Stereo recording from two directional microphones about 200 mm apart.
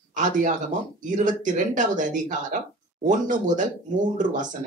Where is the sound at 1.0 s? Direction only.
40° right (ahead or behind).